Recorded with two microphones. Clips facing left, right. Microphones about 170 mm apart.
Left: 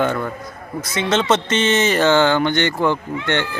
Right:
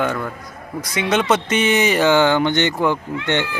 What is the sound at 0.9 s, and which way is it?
A man's voice, 15° right (ahead or behind).